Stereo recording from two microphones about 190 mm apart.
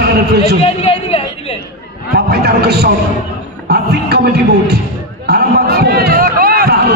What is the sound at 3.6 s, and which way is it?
Music, 55° right (ahead or behind).